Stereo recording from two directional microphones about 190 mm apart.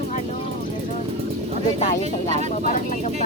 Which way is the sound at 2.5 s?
40° left (ahead or behind).